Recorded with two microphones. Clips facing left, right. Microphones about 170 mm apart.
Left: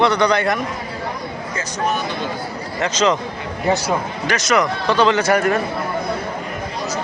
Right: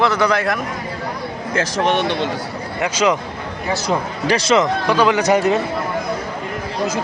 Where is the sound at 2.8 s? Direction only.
10° right (ahead or behind).